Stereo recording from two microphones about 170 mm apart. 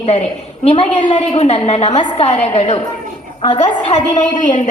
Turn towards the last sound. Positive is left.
turn(degrees=45)  # may be behind; listen again after turning